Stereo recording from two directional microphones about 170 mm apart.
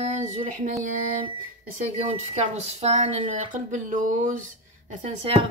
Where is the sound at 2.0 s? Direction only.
40° right (ahead or behind).